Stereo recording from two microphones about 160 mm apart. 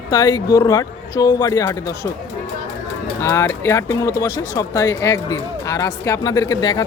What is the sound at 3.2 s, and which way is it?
Speech, 15° left (ahead or behind).